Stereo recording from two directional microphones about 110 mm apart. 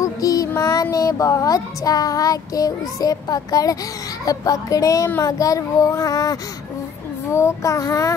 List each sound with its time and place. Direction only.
0.0 s child singing: 35° left (ahead or behind)
7.3 s child singing: 25° left (ahead or behind)